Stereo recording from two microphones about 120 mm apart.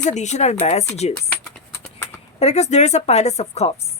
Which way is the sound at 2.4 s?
70° left (ahead or behind).